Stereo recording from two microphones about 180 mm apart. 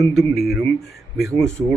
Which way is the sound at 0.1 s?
Centre (ahead or behind).